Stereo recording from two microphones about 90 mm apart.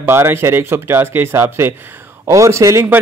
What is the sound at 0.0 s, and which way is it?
Speech, 25° right (ahead or behind).